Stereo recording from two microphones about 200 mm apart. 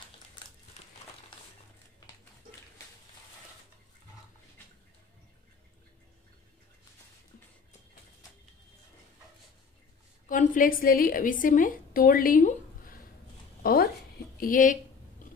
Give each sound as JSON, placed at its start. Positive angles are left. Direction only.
{"t": 10.2, "sound": "a woman's voice", "side_deg": 40}
{"t": 13.6, "sound": "a sound", "side_deg": 50}
{"t": 14.4, "sound": "a woman's voice", "side_deg": 40}